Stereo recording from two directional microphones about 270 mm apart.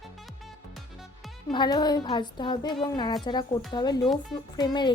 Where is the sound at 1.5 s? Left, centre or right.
Centre.